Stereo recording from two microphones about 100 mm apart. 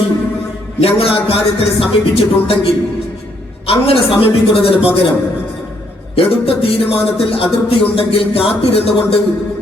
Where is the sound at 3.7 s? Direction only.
65° left (ahead or behind).